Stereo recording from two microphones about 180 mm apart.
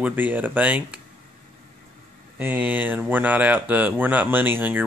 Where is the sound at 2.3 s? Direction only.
10° right (ahead or behind).